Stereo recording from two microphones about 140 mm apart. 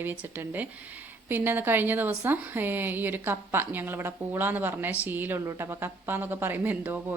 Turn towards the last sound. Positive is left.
turn(degrees=-15)  # may be behind; listen again after turning